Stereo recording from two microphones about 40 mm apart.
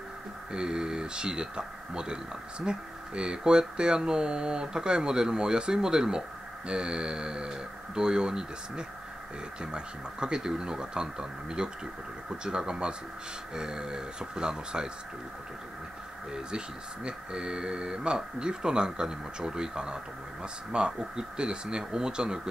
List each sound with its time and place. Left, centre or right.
0.5 s speech: centre
16.3 s speech: right